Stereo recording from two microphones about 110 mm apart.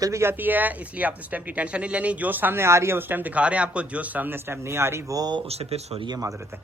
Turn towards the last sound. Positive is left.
turn(degrees=-40)  # may be behind; listen again after turning